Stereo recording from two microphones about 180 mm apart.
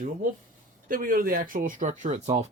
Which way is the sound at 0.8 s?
50° right (ahead or behind).